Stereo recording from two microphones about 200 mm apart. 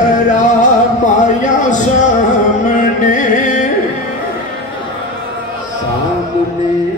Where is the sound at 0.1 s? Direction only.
40° left (ahead or behind).